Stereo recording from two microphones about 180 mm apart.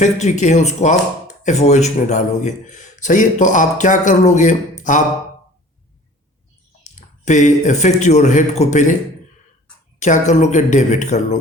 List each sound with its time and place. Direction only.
0.0 s speech: 40° left (ahead or behind)
7.3 s a man's voice: 40° left (ahead or behind)
10.0 s a man's voice: 40° left (ahead or behind)